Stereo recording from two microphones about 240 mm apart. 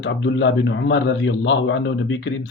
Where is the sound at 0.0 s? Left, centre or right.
Left.